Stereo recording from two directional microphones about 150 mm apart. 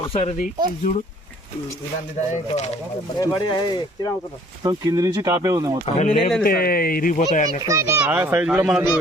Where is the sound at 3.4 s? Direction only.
30° left (ahead or behind).